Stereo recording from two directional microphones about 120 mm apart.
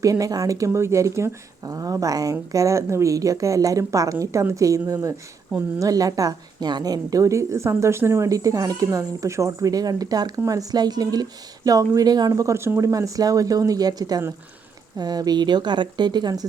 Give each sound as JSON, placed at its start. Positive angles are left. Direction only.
{"t": 0.0, "sound": "a woman's voice", "side_deg": -30}